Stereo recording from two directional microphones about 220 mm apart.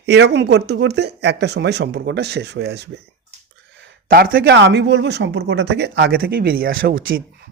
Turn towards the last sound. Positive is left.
turn(degrees=-40)  # may be behind; listen again after turning